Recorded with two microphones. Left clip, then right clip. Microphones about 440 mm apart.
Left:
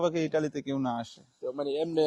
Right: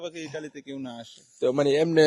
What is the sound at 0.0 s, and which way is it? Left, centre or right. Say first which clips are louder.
Speech: left 8 dB; left.